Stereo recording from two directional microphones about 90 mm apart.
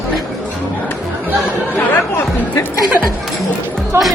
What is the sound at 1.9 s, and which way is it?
Speech, 25° left (ahead or behind).